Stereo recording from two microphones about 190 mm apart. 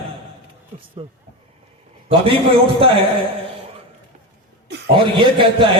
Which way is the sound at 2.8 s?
30° right (ahead or behind).